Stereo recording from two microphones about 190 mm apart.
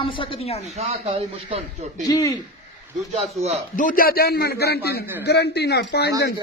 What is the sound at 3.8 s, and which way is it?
A man's voice, 45° left (ahead or behind).